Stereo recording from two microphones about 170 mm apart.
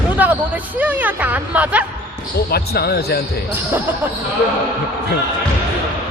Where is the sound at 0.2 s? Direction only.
10° right (ahead or behind).